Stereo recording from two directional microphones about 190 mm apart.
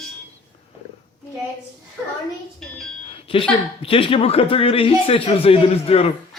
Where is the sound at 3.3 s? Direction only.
30° left (ahead or behind).